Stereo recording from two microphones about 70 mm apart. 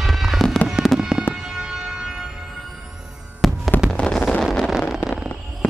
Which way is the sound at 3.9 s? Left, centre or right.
Centre.